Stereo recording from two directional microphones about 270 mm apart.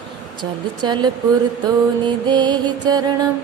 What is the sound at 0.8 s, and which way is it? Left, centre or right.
Music, centre.